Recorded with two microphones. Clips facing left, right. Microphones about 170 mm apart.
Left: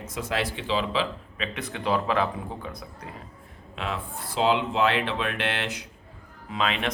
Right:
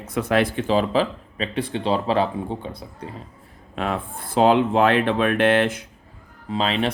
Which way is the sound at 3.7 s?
50° right (ahead or behind).